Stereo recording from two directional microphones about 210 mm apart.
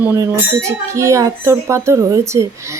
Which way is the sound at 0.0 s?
10° right (ahead or behind).